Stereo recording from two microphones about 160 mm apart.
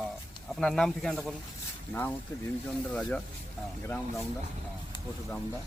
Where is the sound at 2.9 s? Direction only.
5° left (ahead or behind).